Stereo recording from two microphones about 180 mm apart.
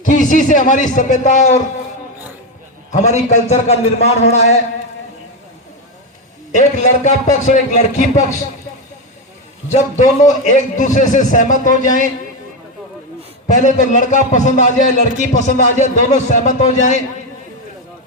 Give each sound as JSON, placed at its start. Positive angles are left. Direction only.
{"t": 0.0, "sound": "a man's voice", "side_deg": 45}
{"t": 2.9, "sound": "a man's voice", "side_deg": 40}
{"t": 6.5, "sound": "a man's voice", "side_deg": 45}
{"t": 9.6, "sound": "a man's voice", "side_deg": 40}
{"t": 13.5, "sound": "a man's voice", "side_deg": 45}